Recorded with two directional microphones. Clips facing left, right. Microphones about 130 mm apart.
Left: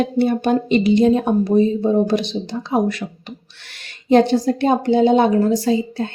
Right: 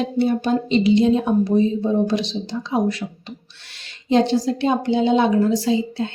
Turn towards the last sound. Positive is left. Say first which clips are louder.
# left 2 dB
turn(degrees=45)  # may be behind; listen again after turning